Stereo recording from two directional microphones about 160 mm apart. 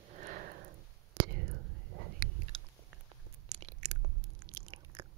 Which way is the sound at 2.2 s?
65° right (ahead or behind).